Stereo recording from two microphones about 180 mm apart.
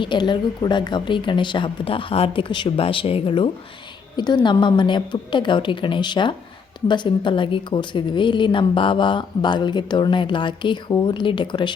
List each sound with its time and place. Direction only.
0.0 s a woman's voice: 25° left (ahead or behind)